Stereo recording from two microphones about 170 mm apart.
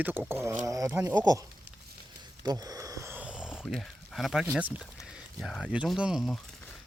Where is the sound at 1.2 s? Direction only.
20° right (ahead or behind).